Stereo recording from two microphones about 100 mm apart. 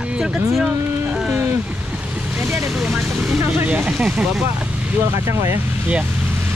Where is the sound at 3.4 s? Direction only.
20° right (ahead or behind).